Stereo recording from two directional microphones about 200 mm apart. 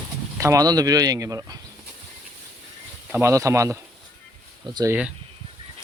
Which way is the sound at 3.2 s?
15° right (ahead or behind).